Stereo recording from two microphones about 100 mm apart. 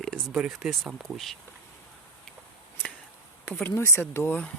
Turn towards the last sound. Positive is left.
turn(degrees=15)  # may be behind; listen again after turning